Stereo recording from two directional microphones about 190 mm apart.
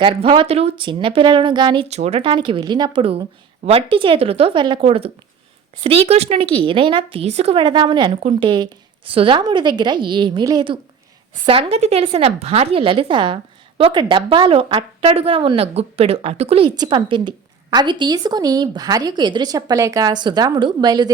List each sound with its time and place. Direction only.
0.0 s a woman's voice: 30° right (ahead or behind)